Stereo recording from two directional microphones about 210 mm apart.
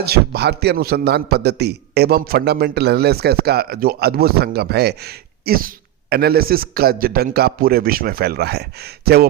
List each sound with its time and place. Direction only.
0.0 s a man's voice: 50° right (ahead or behind)